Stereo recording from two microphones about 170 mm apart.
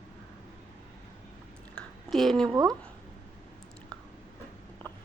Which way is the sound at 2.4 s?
25° right (ahead or behind).